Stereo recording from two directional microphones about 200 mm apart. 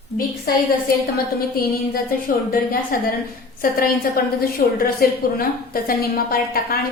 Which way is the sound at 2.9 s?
45° left (ahead or behind).